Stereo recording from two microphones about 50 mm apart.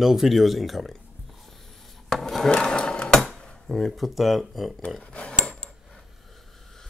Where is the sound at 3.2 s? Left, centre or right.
Centre.